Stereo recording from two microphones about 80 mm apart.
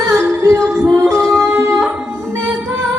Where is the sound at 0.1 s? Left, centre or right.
Right.